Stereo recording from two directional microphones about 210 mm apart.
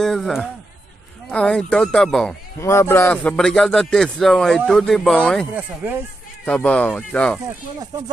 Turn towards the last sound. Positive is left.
turn(degrees=5)  # may be behind; listen again after turning